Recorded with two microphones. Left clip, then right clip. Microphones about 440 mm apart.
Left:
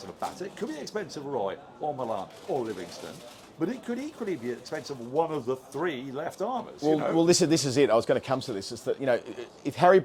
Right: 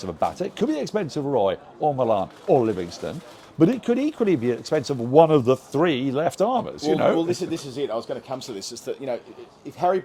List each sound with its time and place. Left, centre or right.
0.0 s speech: right
3.6 s speech: right
7.3 s speech: left
8.4 s speech: left